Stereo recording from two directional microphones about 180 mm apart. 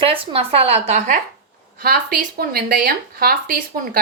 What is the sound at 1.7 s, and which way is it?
A woman's voice, 55° right (ahead or behind).